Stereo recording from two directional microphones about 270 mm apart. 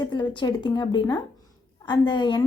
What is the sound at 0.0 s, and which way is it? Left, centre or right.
A woman's voice, centre.